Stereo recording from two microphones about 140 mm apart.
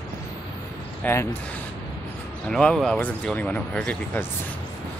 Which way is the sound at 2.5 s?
5° left (ahead or behind).